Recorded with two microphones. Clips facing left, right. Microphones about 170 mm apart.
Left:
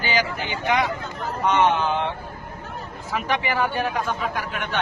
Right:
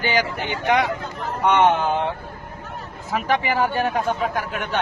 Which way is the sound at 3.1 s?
40° right (ahead or behind).